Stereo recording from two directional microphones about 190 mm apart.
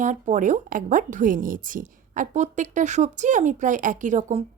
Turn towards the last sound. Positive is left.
turn(degrees=-40)  # may be behind; listen again after turning